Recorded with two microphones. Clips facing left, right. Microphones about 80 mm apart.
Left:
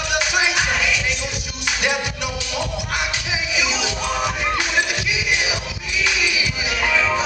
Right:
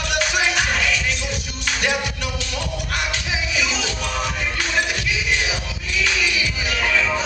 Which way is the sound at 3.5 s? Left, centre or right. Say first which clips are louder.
Left 2 dB; centre.